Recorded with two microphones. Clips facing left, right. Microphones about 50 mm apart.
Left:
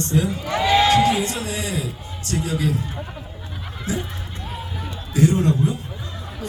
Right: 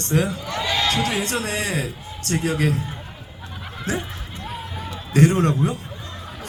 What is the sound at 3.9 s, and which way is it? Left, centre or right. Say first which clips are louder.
Speech: even; right.